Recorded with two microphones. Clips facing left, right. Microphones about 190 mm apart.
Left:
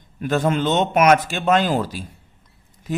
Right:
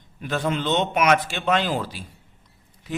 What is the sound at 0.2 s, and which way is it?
A man's voice, 45° left (ahead or behind).